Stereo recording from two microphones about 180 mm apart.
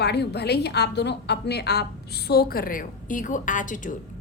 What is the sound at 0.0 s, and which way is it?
A woman's voice, 65° left (ahead or behind).